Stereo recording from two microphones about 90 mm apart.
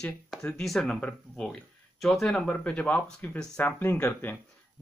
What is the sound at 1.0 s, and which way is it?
Speech, 15° left (ahead or behind).